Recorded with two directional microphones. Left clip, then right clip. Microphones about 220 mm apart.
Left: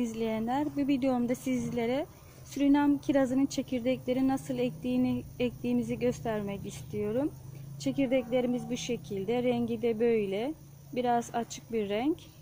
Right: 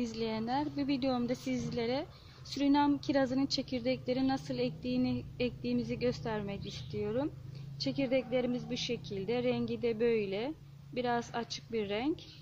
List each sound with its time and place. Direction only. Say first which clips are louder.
0.0 s speech: left 4 dB; 40° left (ahead or behind)